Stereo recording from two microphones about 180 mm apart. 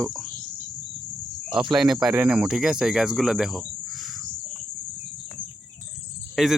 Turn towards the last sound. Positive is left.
turn(degrees=0)  # may be behind; listen again after turning